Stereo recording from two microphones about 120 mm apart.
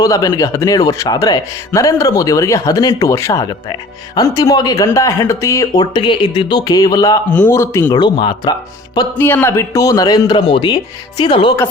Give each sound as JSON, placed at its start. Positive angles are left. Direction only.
{"t": 0.0, "sound": "speech", "side_deg": 35}
{"t": 3.4, "sound": "speech", "side_deg": 35}
{"t": 7.3, "sound": "a man's voice", "side_deg": 10}
{"t": 7.5, "sound": "speech", "side_deg": 20}
{"t": 7.9, "sound": "speech", "side_deg": 40}
{"t": 9.2, "sound": "speech", "side_deg": 20}